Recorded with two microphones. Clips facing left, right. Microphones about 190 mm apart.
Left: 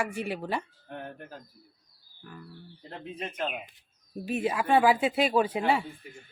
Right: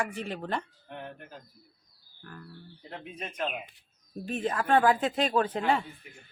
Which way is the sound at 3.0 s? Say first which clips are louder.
Left 5 dB; 30° left (ahead or behind).